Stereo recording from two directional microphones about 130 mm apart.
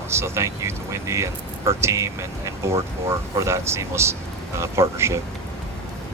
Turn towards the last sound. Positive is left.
turn(degrees=-20)  # may be behind; listen again after turning